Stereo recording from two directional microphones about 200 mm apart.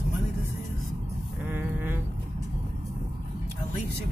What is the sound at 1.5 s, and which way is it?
Sheep, 10° right (ahead or behind).